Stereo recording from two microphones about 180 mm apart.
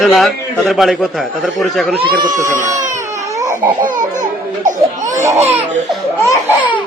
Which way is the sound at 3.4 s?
15° right (ahead or behind).